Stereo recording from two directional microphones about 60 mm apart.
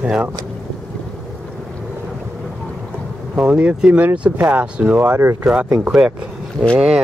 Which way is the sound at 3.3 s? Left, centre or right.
Centre.